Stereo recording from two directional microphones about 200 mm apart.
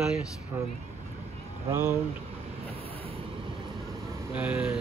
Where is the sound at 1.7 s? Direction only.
10° right (ahead or behind).